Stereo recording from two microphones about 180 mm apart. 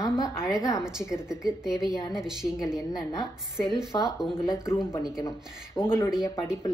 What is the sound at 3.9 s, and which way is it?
Speech, 20° left (ahead or behind).